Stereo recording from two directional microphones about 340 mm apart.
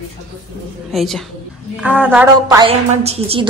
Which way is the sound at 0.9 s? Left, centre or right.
Centre.